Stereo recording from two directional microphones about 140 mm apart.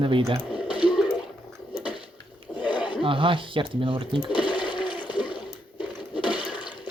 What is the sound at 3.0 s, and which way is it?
Speech, 35° right (ahead or behind).